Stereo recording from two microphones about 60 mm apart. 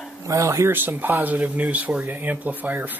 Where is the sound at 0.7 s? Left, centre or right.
Right.